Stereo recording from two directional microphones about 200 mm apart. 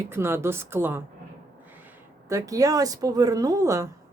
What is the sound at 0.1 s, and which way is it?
Speech, 10° right (ahead or behind).